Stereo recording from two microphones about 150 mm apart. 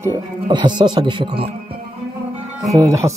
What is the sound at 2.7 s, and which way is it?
Speech, 20° right (ahead or behind).